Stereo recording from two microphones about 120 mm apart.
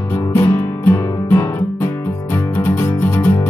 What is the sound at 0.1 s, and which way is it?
Music, 20° left (ahead or behind).